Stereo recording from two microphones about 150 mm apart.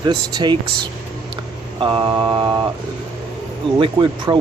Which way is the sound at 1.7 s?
35° right (ahead or behind).